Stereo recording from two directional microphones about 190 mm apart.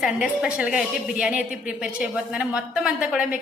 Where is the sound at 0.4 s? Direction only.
5° right (ahead or behind).